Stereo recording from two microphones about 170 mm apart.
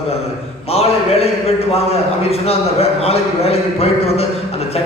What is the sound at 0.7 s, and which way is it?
A man's voice, 35° left (ahead or behind).